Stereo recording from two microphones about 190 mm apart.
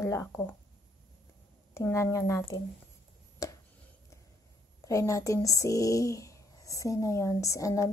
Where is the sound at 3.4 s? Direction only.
20° left (ahead or behind).